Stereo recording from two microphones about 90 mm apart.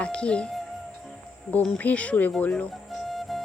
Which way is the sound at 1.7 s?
15° left (ahead or behind).